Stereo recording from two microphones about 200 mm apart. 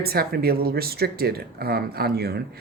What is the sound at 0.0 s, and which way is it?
Speech, 50° right (ahead or behind).